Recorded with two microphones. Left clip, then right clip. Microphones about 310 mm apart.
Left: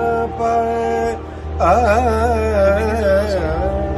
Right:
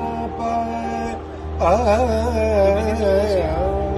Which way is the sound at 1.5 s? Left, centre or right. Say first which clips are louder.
Left 3 dB; centre.